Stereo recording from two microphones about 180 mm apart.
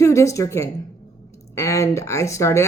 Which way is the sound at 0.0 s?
15° left (ahead or behind).